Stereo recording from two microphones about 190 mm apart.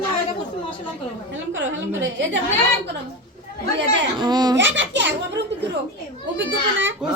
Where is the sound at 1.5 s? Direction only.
80° right.